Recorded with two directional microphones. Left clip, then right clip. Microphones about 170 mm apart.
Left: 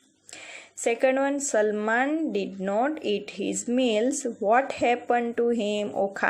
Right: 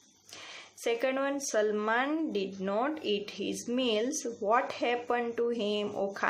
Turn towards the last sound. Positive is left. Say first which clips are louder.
# left 6 dB
turn(degrees=20)  # may be behind; listen again after turning